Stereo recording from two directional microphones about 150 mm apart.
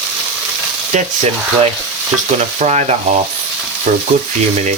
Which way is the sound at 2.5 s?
50° right (ahead or behind).